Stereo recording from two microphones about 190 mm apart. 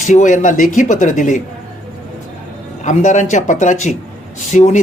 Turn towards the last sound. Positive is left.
turn(degrees=40)  # may be behind; listen again after turning